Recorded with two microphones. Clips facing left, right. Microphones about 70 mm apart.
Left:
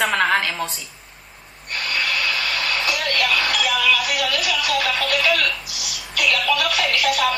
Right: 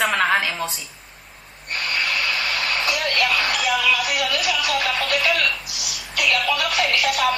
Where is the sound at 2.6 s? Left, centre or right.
Right.